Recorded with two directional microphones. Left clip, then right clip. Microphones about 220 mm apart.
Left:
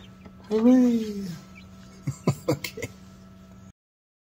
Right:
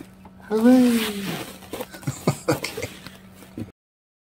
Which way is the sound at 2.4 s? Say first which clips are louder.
Right 4 dB; 20° left (ahead or behind).